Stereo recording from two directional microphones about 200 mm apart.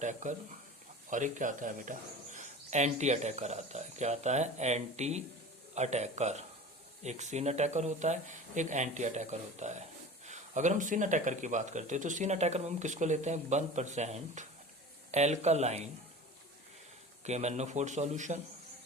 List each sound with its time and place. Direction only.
0.0 s speech: 40° right (ahead or behind)
17.2 s speech: 35° right (ahead or behind)